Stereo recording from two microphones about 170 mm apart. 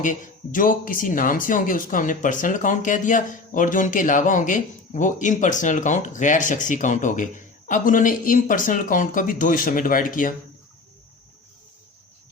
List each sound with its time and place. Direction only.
0.0 s speech: 50° left (ahead or behind)